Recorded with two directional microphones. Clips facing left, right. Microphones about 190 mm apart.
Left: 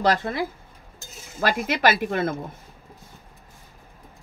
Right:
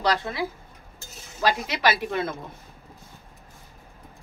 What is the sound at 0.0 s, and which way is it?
Speech, 50° left (ahead or behind).